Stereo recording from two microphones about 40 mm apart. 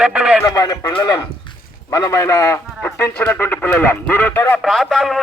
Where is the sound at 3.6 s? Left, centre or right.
Left.